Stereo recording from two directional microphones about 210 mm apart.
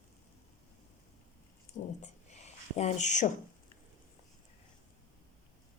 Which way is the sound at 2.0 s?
30° left (ahead or behind).